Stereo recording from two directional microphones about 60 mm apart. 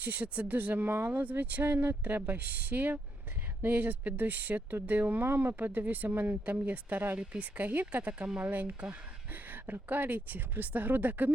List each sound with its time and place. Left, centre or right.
0.0 s speech: right